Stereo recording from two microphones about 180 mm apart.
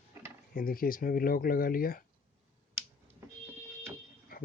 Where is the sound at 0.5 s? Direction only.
55° left (ahead or behind).